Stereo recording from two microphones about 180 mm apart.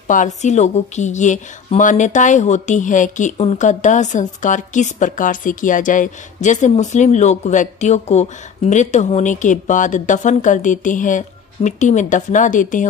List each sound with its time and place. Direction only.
0.1 s a woman's voice: 45° left (ahead or behind)